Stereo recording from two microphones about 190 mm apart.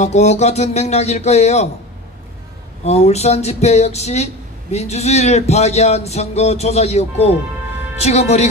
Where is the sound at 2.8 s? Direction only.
35° left (ahead or behind).